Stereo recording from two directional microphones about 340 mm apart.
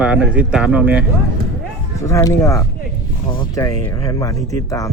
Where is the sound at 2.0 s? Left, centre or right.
Centre.